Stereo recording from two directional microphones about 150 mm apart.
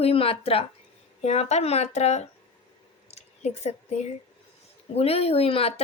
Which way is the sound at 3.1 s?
45° left (ahead or behind).